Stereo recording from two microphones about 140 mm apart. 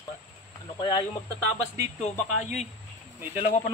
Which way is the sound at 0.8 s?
30° left (ahead or behind).